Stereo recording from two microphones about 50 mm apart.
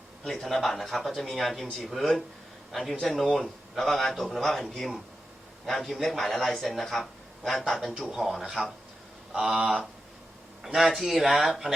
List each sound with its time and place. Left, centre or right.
0.3 s a man's voice: centre
9.3 s speech: centre
10.8 s a man's voice: centre